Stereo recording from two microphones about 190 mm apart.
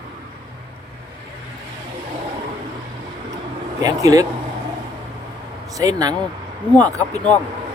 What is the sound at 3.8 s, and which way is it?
Speech, 20° right (ahead or behind).